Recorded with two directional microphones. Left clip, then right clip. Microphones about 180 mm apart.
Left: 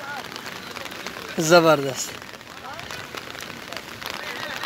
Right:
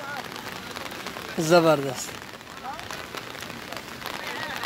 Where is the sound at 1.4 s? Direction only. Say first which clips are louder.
Left 3 dB; centre (ahead or behind).